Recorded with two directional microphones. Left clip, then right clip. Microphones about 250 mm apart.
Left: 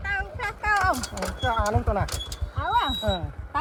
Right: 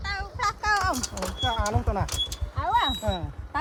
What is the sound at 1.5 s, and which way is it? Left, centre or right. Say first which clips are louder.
Speech: left 3 dB; right.